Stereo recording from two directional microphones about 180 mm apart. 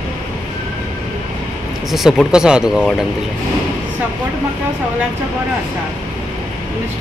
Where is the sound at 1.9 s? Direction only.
Centre (ahead or behind).